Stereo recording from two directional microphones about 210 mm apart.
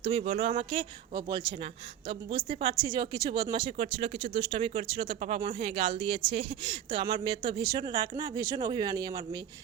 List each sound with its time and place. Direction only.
0.0 s speech: 30° right (ahead or behind)
2.5 s speech: 25° right (ahead or behind)